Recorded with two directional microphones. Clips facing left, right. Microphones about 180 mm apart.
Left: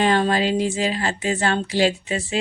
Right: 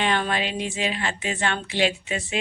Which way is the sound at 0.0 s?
35° left (ahead or behind).